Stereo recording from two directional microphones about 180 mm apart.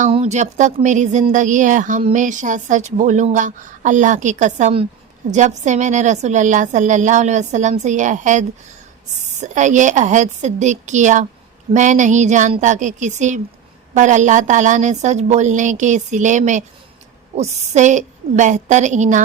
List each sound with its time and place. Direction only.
0.1 s a woman's voice: 35° right (ahead or behind)